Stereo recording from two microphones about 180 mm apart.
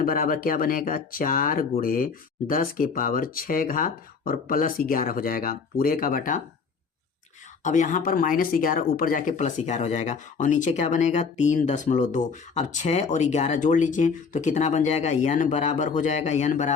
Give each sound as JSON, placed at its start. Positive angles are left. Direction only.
{"t": 0.0, "sound": "speech", "side_deg": 50}
{"t": 7.6, "sound": "speech", "side_deg": 45}